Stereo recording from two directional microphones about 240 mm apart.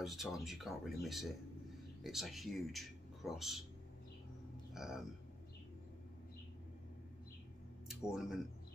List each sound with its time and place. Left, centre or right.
0.0 s speech: centre
4.7 s speech: centre
7.9 s speech: centre